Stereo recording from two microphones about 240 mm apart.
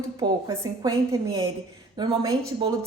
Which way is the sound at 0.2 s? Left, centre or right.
Centre.